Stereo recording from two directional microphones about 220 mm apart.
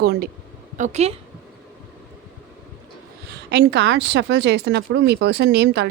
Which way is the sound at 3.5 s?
50° right (ahead or behind).